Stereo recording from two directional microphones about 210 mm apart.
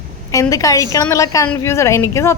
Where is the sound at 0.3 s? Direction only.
15° left (ahead or behind).